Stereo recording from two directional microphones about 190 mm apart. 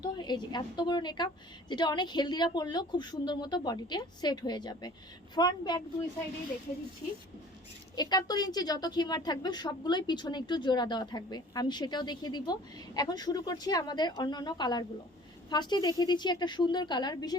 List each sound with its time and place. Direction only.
0.0 s a woman's voice: 25° left (ahead or behind)
7.9 s a woman's voice: 20° left (ahead or behind)